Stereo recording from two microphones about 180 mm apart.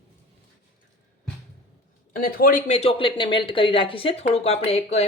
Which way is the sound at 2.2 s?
50° left (ahead or behind).